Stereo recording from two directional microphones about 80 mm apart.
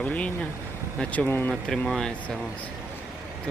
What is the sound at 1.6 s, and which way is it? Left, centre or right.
Speech, centre.